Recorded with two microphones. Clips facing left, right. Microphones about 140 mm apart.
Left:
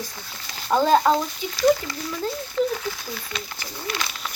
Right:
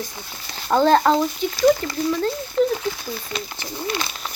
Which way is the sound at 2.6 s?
20° right (ahead or behind).